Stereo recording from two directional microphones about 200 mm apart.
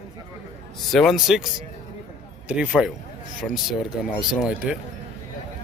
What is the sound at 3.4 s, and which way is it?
Speech, 5° left (ahead or behind).